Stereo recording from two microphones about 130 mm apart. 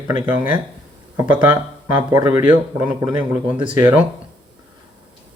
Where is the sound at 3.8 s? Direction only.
15° right (ahead or behind).